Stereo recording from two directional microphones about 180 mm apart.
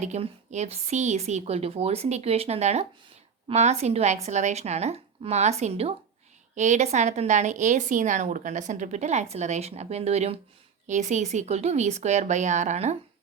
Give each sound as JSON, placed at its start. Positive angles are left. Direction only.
{"t": 0.0, "sound": "a woman's voice", "side_deg": -40}